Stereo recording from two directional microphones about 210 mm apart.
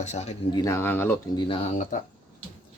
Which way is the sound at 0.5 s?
15° left (ahead or behind).